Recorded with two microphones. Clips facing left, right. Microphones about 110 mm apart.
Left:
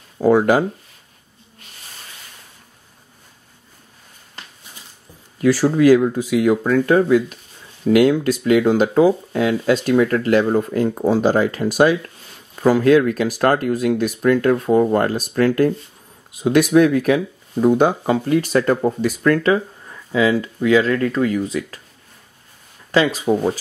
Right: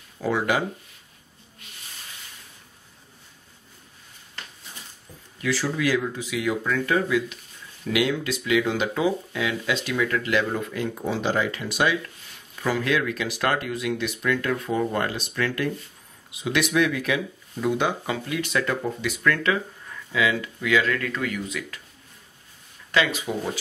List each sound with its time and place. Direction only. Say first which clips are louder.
0.2 s speech: left 10 dB; 45° left (ahead or behind)
5.4 s speech: left 11 dB; 45° left (ahead or behind)
22.8 s speech: left 8 dB; 35° left (ahead or behind)